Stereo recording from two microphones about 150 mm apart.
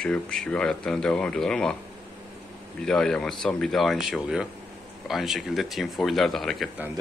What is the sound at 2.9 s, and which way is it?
Speech, 5° left (ahead or behind).